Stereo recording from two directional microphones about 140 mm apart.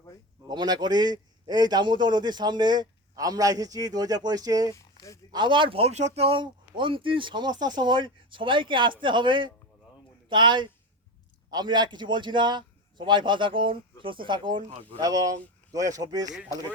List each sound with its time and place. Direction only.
0.4 s a man's voice: 30° right (ahead or behind)
4.7 s a sound: 20° left (ahead or behind)
5.3 s a man's voice: 35° right (ahead or behind)